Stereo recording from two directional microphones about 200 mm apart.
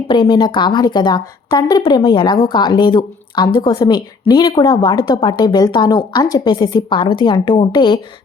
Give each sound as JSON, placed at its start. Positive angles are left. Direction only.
{"t": 0.1, "sound": "a woman's voice", "side_deg": 20}